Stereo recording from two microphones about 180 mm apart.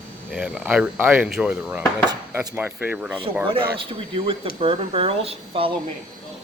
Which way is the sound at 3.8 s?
30° right (ahead or behind).